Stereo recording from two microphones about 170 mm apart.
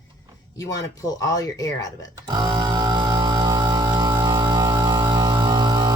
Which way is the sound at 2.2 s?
25° right (ahead or behind).